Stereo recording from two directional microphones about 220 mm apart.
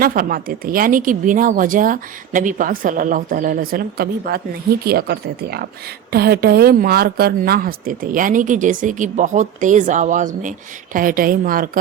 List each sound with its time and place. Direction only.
0.0 s a woman's voice: 40° right (ahead or behind)